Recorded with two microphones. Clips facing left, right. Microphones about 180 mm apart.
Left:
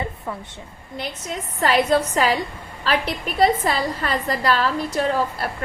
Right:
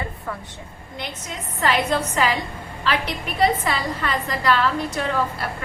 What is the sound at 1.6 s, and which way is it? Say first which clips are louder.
A woman's voice: left 3 dB; 40° left (ahead or behind).